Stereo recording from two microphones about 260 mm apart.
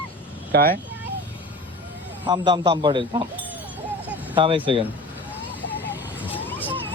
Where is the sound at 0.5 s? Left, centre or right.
Right.